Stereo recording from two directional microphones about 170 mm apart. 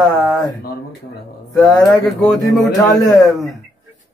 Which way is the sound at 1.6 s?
5° left (ahead or behind).